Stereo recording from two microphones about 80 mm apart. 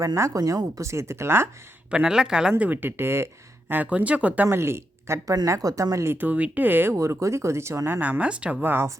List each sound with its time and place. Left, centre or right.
0.0 s speech: right
1.9 s speech: centre; by 3.2 s right
3.7 s speech: centre
4.4 s speech: right
6.9 s speech: right
8.2 s speech: centre
8.6 s speech: right